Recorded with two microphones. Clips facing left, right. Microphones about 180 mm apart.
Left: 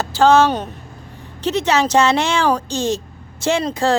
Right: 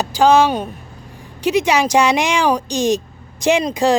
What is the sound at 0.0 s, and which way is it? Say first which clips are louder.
Speech: even; 15° right (ahead or behind).